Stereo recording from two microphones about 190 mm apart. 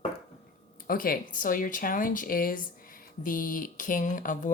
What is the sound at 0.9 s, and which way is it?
Speech, 50° left (ahead or behind).